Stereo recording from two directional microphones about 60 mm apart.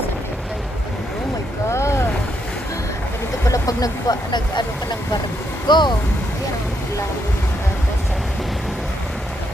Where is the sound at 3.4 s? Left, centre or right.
Left.